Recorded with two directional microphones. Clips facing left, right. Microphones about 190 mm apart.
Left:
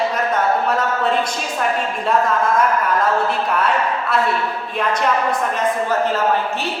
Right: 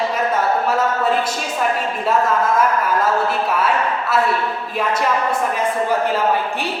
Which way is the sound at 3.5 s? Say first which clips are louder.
Even; 5° right (ahead or behind).